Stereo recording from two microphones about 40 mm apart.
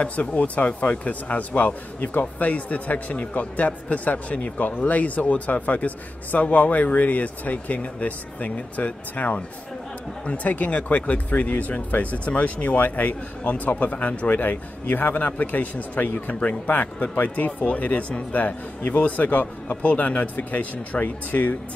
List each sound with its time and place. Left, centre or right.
0.0 s speech: left
14.3 s speech: left